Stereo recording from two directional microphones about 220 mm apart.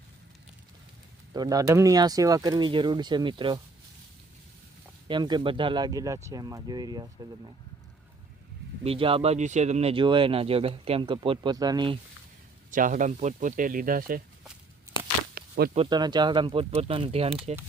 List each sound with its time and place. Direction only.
1.3 s speech: 15° right (ahead or behind)
5.0 s speech: 20° right (ahead or behind)
8.8 s speech: 25° right (ahead or behind)
12.7 s speech: 35° right (ahead or behind)
15.4 s a sound: 45° right (ahead or behind)
15.7 s speech: 25° right (ahead or behind)